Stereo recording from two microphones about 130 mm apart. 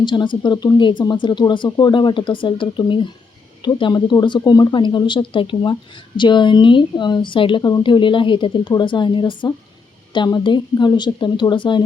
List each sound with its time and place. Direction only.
0.0 s speech: 35° left (ahead or behind)